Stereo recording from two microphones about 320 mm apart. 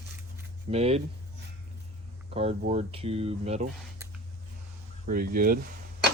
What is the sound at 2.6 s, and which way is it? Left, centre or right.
Cutlery, centre.